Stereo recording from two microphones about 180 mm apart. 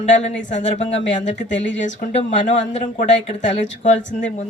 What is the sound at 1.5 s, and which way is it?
Speech, 90° left.